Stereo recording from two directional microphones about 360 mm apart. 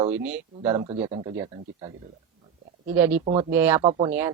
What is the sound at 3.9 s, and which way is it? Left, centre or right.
Speech, centre.